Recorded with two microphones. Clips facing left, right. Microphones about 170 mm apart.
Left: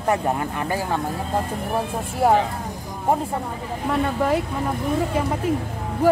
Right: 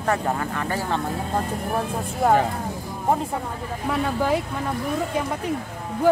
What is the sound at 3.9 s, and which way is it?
Speech, centre (ahead or behind).